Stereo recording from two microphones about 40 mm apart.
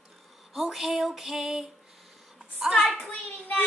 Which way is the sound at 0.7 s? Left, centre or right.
Centre.